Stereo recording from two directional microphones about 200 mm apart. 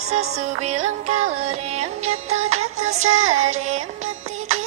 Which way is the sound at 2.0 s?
90° right.